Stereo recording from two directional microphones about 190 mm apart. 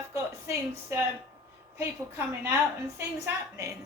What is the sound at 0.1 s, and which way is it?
Speech, 15° right (ahead or behind).